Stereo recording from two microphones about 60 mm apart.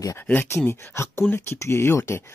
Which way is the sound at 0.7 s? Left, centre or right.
Left.